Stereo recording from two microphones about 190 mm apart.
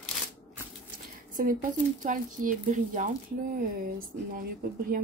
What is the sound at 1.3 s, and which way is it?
A woman's voice, 45° right (ahead or behind).